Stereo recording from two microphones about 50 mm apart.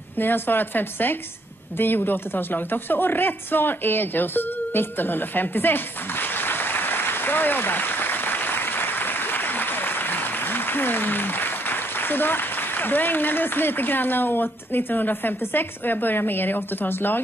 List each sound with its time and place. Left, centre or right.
0.2 s a woman's voice: left